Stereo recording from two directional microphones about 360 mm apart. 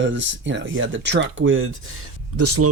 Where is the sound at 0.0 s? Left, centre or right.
Right.